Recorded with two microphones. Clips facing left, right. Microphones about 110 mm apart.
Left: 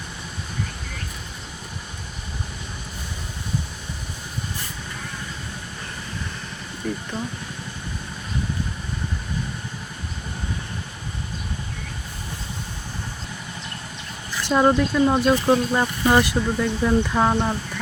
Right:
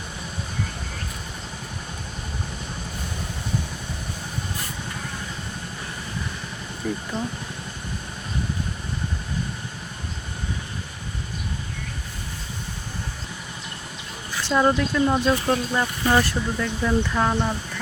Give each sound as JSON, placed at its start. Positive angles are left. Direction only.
{"t": 6.8, "sound": "speech", "side_deg": -10}
{"t": 14.4, "sound": "speech", "side_deg": 20}